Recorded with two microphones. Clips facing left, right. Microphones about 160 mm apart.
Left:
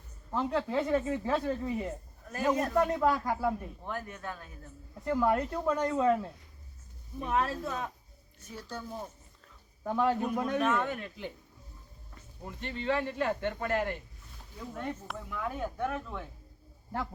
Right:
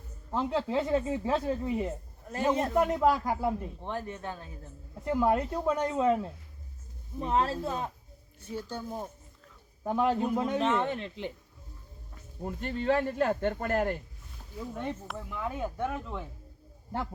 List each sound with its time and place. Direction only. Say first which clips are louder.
0.3 s a man's voice: right 1 dB; 20° right (ahead or behind)
1.0 s a man's voice: right 1 dB; 10° right (ahead or behind)
7.2 s a man's voice: right 2 dB; 30° right (ahead or behind)
9.8 s a man's voice: right 1 dB; 15° right (ahead or behind)
12.5 s speech: right 4 dB; 45° right (ahead or behind)
15.1 s speech: right 1 dB; centre (ahead or behind)